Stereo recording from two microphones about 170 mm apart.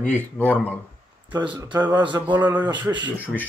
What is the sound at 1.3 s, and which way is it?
Speech, 25° right (ahead or behind).